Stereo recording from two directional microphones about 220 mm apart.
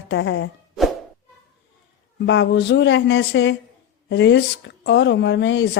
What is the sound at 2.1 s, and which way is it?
A woman's voice, 55° left (ahead or behind).